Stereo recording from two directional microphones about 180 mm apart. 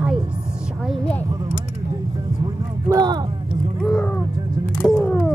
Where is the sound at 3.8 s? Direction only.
5° left (ahead or behind).